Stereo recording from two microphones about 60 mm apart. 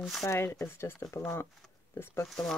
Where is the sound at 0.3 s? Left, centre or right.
Left.